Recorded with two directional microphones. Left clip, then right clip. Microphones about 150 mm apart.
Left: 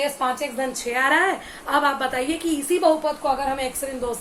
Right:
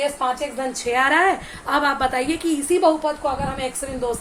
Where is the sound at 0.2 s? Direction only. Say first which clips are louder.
Right 1 dB; 15° right (ahead or behind).